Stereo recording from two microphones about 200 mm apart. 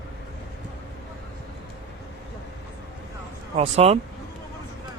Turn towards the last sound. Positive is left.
turn(degrees=-30)  # may be behind; listen again after turning